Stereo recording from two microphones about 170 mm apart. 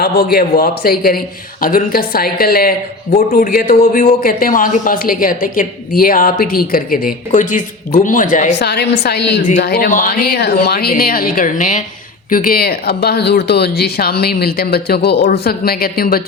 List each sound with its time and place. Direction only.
0.0 s a man's voice: 65° left (ahead or behind); by 8.5 s 50° left (ahead or behind)
8.5 s a woman's voice: 80° left
9.6 s a man's voice: 65° left (ahead or behind)